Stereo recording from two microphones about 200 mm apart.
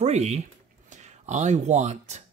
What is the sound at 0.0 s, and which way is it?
Speech, 35° right (ahead or behind).